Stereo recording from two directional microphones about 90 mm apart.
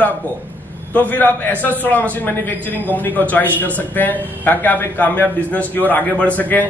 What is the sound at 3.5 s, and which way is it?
A man's voice, 20° left (ahead or behind).